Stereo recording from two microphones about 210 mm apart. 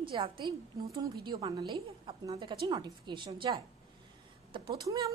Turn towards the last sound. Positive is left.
turn(degrees=-20)  # may be behind; listen again after turning